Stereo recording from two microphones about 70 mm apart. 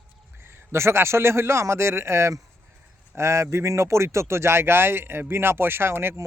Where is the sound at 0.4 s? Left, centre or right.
Right.